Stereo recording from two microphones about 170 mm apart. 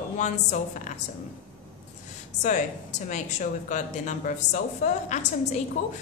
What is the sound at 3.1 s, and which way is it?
A woman's voice, 45° left (ahead or behind).